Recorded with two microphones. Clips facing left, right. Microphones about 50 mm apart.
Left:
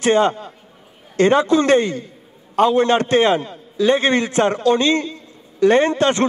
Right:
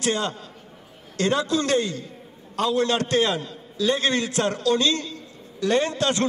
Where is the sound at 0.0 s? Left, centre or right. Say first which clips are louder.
Left 10 dB; left.